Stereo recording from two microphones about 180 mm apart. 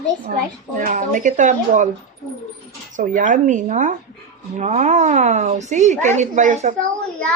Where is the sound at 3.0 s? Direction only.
45° right (ahead or behind).